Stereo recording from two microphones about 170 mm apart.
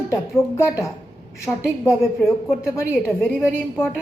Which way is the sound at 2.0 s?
Centre (ahead or behind).